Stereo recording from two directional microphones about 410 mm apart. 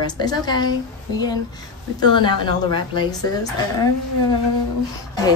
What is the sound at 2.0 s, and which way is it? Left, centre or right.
Speech, centre.